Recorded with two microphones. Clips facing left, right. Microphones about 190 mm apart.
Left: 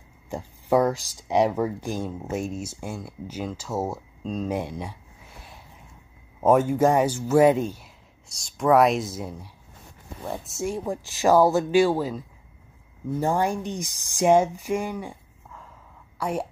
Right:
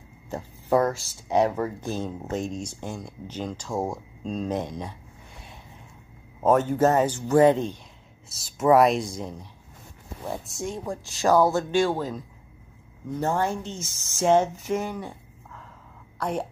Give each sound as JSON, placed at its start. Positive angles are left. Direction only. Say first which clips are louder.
{"t": 0.3, "sound": "speech", "louder": "left 1 dB", "side_deg": 10}
{"t": 8.3, "sound": "speech", "louder": "right 1 dB", "side_deg": -5}
{"t": 10.9, "sound": "speech", "louder": "left 1 dB", "side_deg": 15}
{"t": 13.2, "sound": "a woman's voice", "louder": "left 1 dB", "side_deg": 15}